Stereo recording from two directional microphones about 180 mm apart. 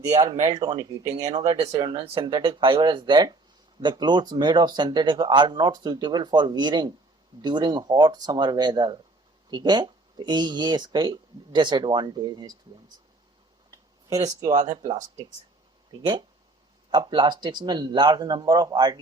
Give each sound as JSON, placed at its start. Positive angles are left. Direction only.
{"t": 0.2, "sound": "speech", "side_deg": -20}
{"t": 15.9, "sound": "speech", "side_deg": -30}